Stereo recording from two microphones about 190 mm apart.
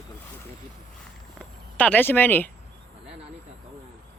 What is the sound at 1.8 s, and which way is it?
Speech, 10° left (ahead or behind).